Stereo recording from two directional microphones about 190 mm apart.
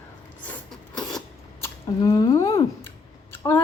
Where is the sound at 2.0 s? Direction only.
15° left (ahead or behind).